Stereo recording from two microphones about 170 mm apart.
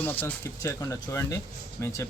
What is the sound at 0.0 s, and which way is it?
Speech, 10° left (ahead or behind).